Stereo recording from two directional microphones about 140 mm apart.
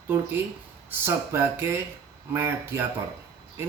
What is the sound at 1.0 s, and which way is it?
Speech, 15° right (ahead or behind).